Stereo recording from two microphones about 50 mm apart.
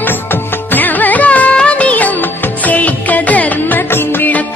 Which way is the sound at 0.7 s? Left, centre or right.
Left.